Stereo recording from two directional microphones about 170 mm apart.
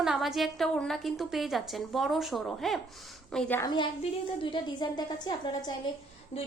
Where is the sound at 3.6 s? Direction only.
25° left (ahead or behind).